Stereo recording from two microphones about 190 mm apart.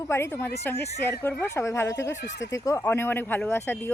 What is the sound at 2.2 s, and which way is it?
Speech, 65° left (ahead or behind).